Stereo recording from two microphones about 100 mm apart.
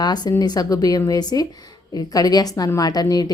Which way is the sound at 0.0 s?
40° left (ahead or behind).